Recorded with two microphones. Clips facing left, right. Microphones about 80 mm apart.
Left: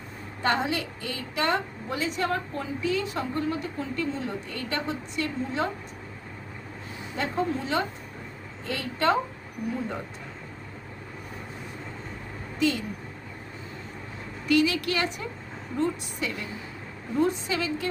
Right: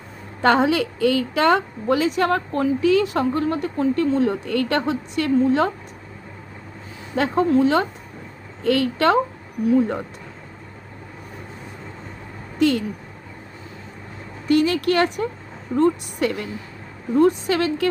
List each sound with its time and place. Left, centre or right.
0.4 s a woman's voice: right
7.2 s a woman's voice: right
12.5 s a sound: right
14.4 s a woman's voice: right